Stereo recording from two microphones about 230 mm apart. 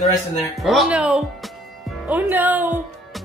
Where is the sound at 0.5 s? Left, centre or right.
Centre.